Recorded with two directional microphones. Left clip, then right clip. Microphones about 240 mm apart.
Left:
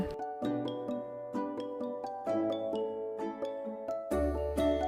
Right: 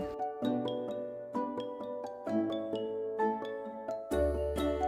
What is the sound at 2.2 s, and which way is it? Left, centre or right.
Music, centre.